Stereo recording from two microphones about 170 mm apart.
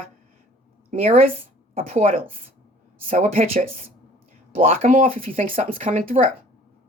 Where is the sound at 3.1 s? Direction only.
40° right (ahead or behind).